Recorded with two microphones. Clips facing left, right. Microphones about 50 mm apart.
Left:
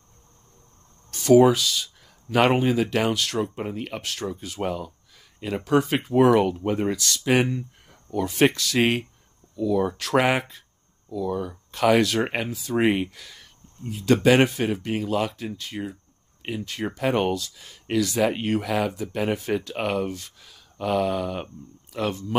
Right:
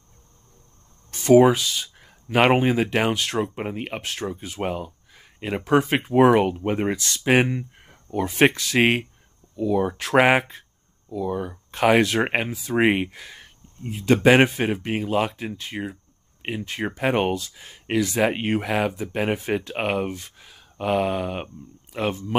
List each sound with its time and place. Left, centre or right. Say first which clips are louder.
1.1 s speech: right 1 dB; right